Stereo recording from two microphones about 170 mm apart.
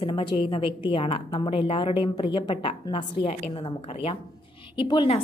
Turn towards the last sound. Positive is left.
turn(degrees=30)  # may be behind; listen again after turning